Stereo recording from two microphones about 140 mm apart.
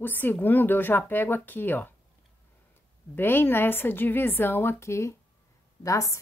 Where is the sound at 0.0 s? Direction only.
15° left (ahead or behind).